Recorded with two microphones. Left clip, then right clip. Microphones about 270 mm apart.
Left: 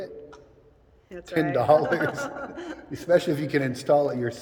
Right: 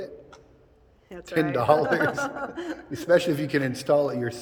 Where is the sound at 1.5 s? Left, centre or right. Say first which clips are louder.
Left 2 dB; centre.